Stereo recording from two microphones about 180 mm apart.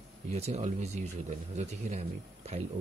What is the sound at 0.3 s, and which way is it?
Speech, 35° right (ahead or behind).